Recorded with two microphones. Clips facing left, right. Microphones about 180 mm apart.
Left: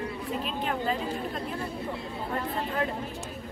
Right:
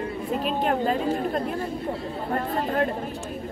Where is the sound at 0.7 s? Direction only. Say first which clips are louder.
Right 6 dB; 50° right (ahead or behind).